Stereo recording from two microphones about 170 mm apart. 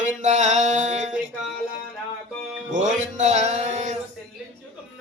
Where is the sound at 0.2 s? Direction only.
45° right (ahead or behind).